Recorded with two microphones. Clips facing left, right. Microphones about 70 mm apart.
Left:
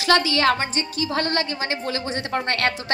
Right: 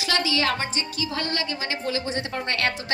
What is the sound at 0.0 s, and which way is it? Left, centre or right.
A woman's voice, left.